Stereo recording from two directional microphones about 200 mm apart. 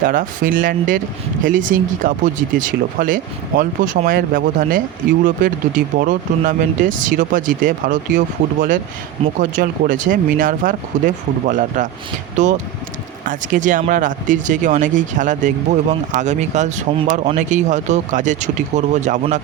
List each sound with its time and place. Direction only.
0.0 s speech: 40° right (ahead or behind)
9.4 s speech: 40° right (ahead or behind)